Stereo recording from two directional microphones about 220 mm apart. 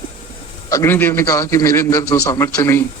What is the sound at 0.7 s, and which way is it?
A man's voice, 10° left (ahead or behind).